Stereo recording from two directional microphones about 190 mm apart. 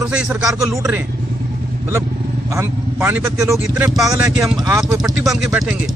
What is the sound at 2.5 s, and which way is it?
Speech, 10° right (ahead or behind).